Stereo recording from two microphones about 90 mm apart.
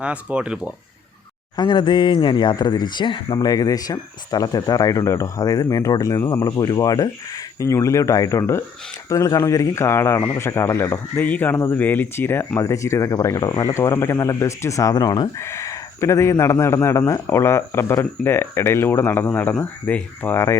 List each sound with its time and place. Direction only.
0.0 s speech: 15° right (ahead or behind)
1.5 s speech: 60° left (ahead or behind)
3.3 s speech: 45° left (ahead or behind)
13.7 s speech: 30° left (ahead or behind); by 15.3 s 45° left (ahead or behind)
15.4 s a sound: 30° left (ahead or behind)
16.4 s speech: 35° left (ahead or behind); by 20.4 s 15° left (ahead or behind)